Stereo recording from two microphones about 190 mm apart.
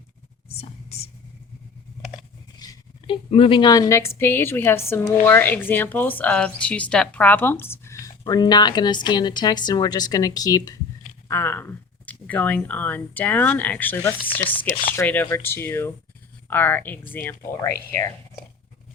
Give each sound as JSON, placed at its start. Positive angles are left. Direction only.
{"t": 0.4, "sound": "whispering", "side_deg": 30}
{"t": 2.6, "sound": "a sound", "side_deg": 20}
{"t": 3.1, "sound": "a woman's voice", "side_deg": 30}